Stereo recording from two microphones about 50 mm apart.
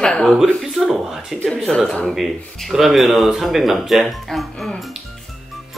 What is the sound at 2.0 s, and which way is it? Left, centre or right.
Speech, centre.